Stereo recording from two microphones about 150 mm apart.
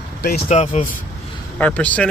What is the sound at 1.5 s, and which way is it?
Speech, 10° left (ahead or behind).